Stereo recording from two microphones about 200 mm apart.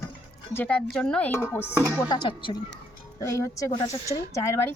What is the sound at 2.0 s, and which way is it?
A woman's voice, 20° left (ahead or behind).